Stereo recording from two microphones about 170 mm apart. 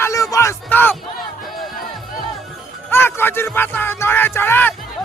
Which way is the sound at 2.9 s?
15° left (ahead or behind).